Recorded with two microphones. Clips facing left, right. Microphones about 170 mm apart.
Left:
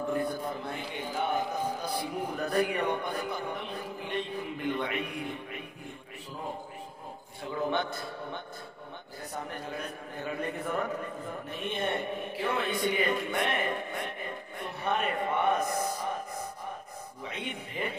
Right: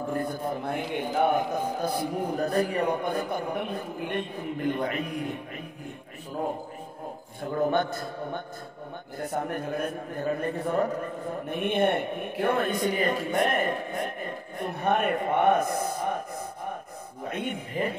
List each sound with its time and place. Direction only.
0.1 s a man's voice: 45° right (ahead or behind)
7.4 s a man's voice: 50° right (ahead or behind)
11.4 s a man's voice: 55° right (ahead or behind)
17.2 s a man's voice: 50° right (ahead or behind)